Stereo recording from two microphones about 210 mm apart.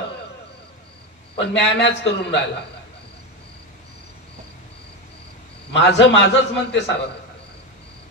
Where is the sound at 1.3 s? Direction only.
55° left (ahead or behind).